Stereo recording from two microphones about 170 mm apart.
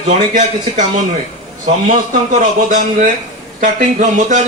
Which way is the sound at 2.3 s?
50° right (ahead or behind).